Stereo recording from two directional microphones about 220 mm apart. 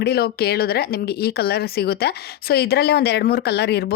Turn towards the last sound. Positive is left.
turn(degrees=50)  # may be behind; listen again after turning